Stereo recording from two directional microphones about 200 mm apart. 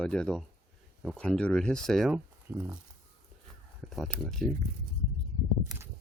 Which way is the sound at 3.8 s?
Centre (ahead or behind).